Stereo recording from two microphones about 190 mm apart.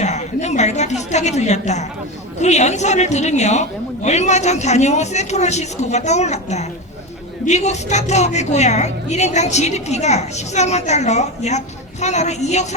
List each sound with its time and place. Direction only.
0.0 s a woman's voice: 35° left (ahead or behind)